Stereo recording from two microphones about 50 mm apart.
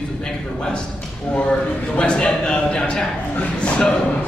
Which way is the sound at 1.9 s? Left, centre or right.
Left.